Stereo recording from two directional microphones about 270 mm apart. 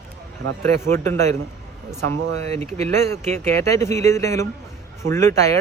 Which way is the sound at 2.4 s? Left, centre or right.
Right.